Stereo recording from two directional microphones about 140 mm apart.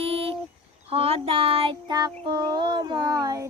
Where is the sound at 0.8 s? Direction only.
45° right (ahead or behind).